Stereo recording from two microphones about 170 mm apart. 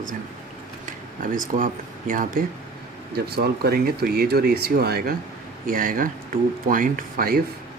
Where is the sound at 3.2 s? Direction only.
70° right (ahead or behind).